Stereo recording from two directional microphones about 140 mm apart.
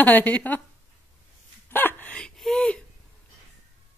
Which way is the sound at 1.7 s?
15° left (ahead or behind).